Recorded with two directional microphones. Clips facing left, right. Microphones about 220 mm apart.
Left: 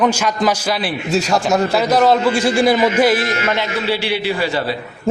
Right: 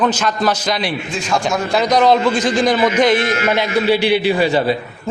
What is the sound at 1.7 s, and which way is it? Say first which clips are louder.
A man's voice: right 3 dB; 5° left (ahead or behind).